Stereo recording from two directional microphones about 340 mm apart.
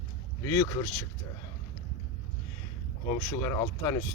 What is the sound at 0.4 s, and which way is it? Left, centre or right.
Speech, centre.